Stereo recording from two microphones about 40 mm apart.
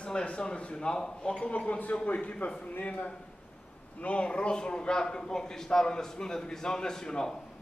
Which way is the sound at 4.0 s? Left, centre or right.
Left.